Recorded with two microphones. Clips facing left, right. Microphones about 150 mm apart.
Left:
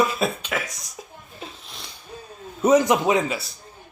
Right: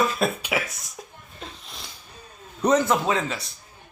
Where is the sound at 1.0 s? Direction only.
5° left (ahead or behind).